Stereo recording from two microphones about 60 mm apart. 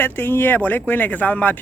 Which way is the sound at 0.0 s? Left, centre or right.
Left.